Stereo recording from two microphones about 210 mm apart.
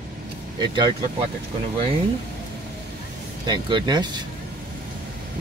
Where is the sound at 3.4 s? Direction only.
20° right (ahead or behind).